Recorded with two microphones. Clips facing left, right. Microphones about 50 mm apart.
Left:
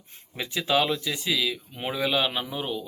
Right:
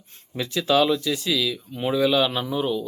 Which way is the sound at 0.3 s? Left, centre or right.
Centre.